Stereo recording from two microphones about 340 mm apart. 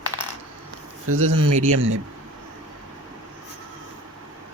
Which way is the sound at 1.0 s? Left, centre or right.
Right.